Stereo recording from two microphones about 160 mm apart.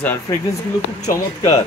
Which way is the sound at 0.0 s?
15° left (ahead or behind).